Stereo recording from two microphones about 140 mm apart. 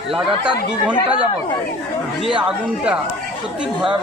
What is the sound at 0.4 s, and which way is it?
Speech, 10° right (ahead or behind).